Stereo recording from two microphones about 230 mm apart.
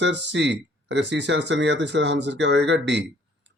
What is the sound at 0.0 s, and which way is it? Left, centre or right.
Speech, right.